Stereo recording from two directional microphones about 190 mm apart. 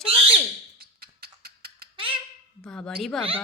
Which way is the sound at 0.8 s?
55° right (ahead or behind).